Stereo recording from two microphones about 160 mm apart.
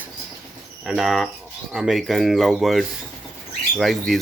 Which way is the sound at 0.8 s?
Centre (ahead or behind).